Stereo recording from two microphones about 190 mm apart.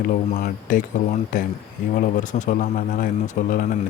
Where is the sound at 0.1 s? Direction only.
45° left (ahead or behind).